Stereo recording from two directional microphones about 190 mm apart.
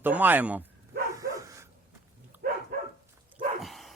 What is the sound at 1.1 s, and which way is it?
Dog, 15° right (ahead or behind).